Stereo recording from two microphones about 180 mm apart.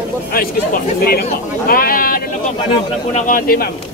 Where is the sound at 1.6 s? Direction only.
55° left (ahead or behind).